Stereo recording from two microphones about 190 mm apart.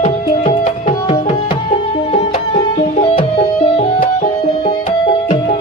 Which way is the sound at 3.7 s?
35° left (ahead or behind).